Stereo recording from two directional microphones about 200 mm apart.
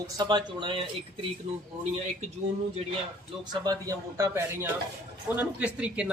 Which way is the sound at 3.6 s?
20° right (ahead or behind).